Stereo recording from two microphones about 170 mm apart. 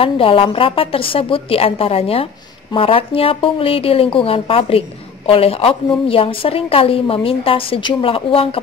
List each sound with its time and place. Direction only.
0.0 s a woman's voice: 30° left (ahead or behind)